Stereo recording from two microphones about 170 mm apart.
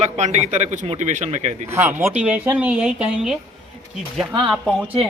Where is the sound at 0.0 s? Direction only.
40° right (ahead or behind).